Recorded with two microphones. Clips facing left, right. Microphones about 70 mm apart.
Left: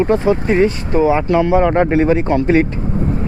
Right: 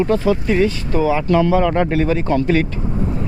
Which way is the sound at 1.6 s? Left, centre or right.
Left.